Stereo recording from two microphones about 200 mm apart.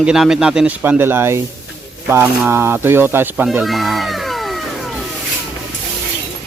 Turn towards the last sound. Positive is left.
turn(degrees=0)  # may be behind; listen again after turning